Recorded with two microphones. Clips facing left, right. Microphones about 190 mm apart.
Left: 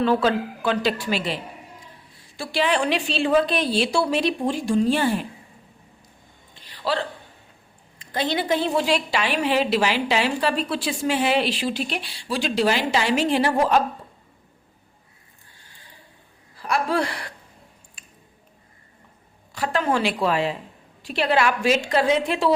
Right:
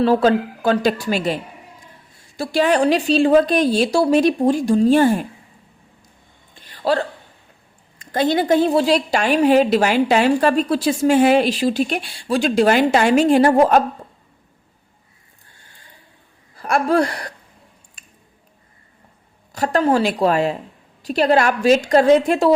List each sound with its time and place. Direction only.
0.0 s a woman's voice: 40° right (ahead or behind)
6.6 s a sound: 50° right (ahead or behind)
7.9 s a woman's voice: 45° right (ahead or behind)
16.6 s a woman's voice: 50° right (ahead or behind)
19.5 s a woman's voice: 40° right (ahead or behind)